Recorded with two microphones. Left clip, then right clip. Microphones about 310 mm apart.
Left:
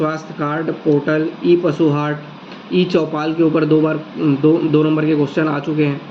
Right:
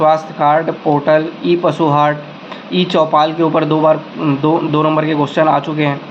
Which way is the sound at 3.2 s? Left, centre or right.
Right.